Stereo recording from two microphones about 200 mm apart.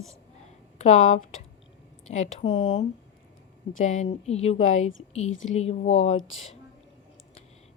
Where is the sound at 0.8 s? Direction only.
35° left (ahead or behind).